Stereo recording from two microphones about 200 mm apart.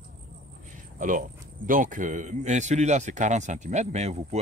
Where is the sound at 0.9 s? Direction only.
40° right (ahead or behind).